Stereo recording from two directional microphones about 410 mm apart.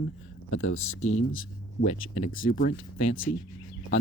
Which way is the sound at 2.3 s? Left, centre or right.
Left.